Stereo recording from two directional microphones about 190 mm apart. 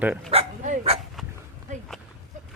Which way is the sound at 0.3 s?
35° right (ahead or behind).